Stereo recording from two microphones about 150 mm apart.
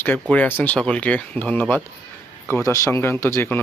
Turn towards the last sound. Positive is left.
turn(degrees=15)  # may be behind; listen again after turning